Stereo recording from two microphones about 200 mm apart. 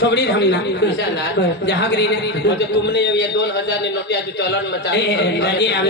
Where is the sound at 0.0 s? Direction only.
60° left (ahead or behind).